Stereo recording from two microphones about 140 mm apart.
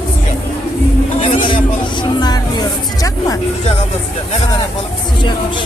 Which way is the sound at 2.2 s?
30° left (ahead or behind).